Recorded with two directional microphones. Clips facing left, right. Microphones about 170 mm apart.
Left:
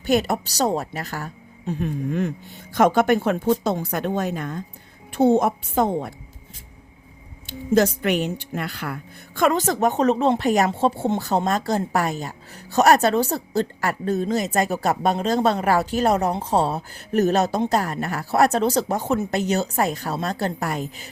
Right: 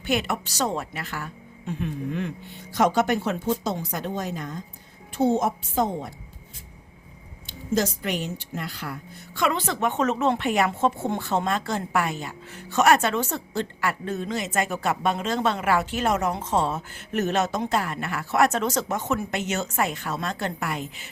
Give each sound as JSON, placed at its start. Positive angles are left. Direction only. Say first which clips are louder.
{"t": 0.0, "sound": "a woman's voice", "louder": "left 5 dB", "side_deg": 40}
{"t": 7.4, "sound": "a woman's voice", "louder": "left 6 dB", "side_deg": 60}